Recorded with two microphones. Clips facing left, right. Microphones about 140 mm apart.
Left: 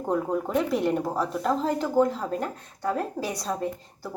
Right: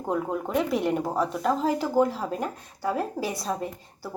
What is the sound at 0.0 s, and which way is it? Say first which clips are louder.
Speech: left 2 dB; centre (ahead or behind).